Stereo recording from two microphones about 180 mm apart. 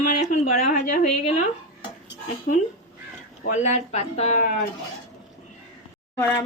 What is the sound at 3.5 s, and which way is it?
Speech, 40° left (ahead or behind).